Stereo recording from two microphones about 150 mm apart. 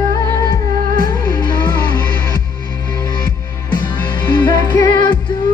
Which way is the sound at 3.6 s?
30° left (ahead or behind).